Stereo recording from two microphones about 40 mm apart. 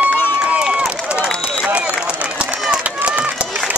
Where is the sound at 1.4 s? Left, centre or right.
Right.